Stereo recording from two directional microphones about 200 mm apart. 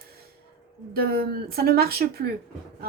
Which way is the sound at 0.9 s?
50° right (ahead or behind).